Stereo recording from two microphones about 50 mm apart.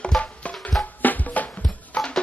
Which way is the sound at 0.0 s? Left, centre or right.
Left.